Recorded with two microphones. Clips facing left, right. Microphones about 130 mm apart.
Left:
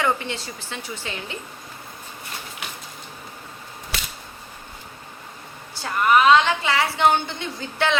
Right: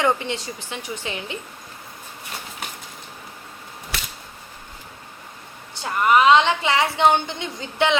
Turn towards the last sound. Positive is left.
turn(degrees=-20)  # may be behind; listen again after turning